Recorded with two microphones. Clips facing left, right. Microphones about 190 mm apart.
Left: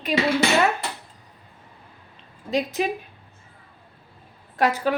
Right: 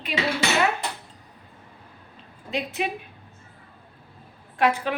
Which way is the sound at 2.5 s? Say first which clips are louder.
Left 5 dB; 40° left (ahead or behind).